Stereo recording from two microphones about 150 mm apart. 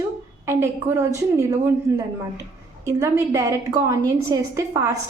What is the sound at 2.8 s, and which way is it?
A woman's voice, 15° right (ahead or behind).